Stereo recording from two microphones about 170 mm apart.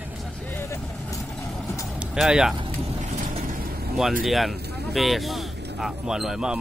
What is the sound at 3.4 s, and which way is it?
Vehicle, 60° right (ahead or behind).